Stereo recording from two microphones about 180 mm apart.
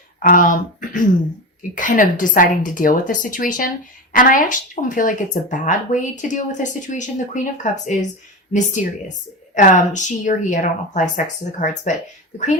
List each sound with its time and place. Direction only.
0.2 s speech: 50° left (ahead or behind)